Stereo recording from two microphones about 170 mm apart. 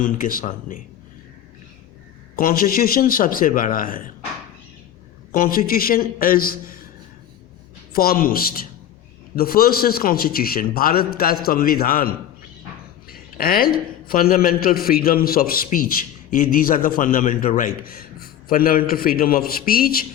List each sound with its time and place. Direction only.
0.0 s speech: 50° left (ahead or behind)
2.3 s a man's voice: 60° left (ahead or behind)
5.3 s a man's voice: 55° left (ahead or behind)
7.9 s a man's voice: 60° left (ahead or behind)